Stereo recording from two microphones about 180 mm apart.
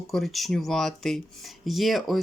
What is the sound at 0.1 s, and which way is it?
Speech, centre (ahead or behind).